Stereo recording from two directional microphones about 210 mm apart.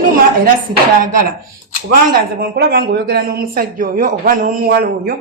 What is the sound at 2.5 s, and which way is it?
A man's voice, 50° right (ahead or behind).